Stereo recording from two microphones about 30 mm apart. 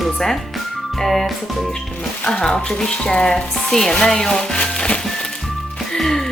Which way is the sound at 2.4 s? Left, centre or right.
Left.